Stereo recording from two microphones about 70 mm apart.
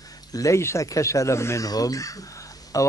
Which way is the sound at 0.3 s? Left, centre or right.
Left.